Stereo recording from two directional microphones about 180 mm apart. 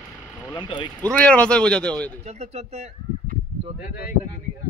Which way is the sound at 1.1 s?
5° left (ahead or behind).